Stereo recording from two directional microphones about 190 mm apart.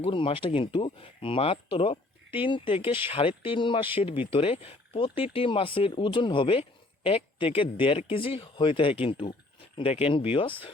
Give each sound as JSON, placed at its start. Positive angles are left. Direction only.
{"t": 0.0, "sound": "speech", "side_deg": 30}